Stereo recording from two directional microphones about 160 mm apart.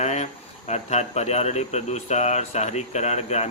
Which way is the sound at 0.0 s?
45° left (ahead or behind).